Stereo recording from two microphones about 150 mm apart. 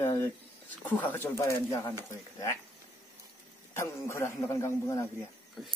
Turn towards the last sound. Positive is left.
turn(degrees=20)  # may be behind; listen again after turning